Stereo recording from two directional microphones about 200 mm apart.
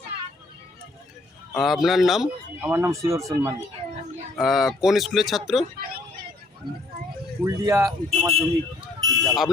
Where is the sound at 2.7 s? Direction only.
15° right (ahead or behind).